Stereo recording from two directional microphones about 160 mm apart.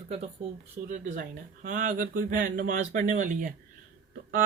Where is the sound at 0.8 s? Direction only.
55° right (ahead or behind).